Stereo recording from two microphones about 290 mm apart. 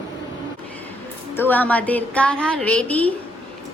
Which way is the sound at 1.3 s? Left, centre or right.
Centre.